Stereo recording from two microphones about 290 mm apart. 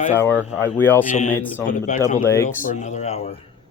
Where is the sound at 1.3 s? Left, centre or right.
Centre.